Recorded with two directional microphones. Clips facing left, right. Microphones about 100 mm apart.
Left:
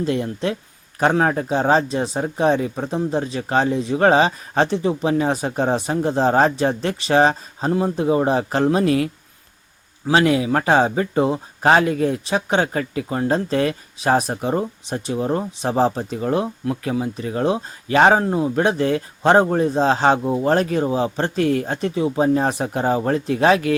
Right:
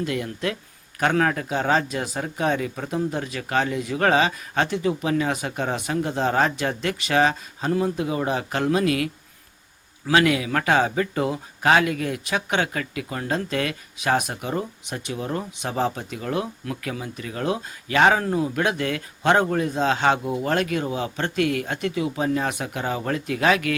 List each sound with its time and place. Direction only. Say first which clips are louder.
0.0 s speech: left 5 dB; 30° left (ahead or behind)
10.1 s speech: left 3 dB; 30° left (ahead or behind)